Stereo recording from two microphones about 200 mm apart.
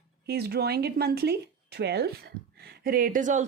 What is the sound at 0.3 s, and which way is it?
A woman's voice, 55° right (ahead or behind).